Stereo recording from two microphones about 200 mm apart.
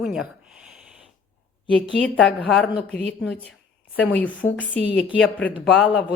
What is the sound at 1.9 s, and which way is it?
Speech, 5° left (ahead or behind).